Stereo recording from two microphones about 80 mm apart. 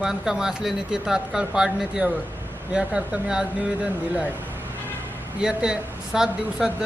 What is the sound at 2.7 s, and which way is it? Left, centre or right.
Speech, centre.